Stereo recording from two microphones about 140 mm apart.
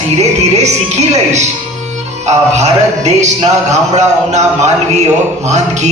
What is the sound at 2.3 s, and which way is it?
Speech, 55° right (ahead or behind).